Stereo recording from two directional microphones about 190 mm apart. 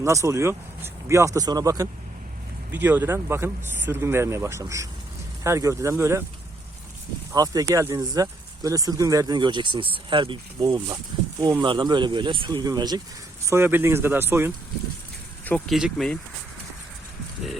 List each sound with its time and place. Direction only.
0.0 s speech: 15° right (ahead or behind)
7.3 s speech: 20° right (ahead or behind)
15.4 s speech: 5° left (ahead or behind)